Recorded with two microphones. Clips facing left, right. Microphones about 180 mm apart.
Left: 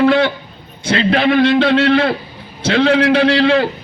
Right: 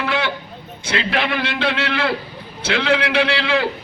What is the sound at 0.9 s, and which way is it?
Speech, 35° left (ahead or behind).